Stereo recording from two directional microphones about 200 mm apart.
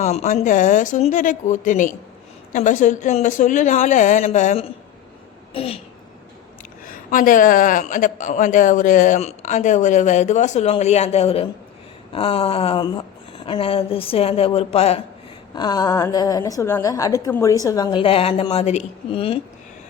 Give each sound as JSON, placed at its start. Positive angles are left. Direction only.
{"t": 0.0, "sound": "a man's voice", "side_deg": 35}
{"t": 6.8, "sound": "a man's voice", "side_deg": 40}
{"t": 15.5, "sound": "a woman's voice", "side_deg": 20}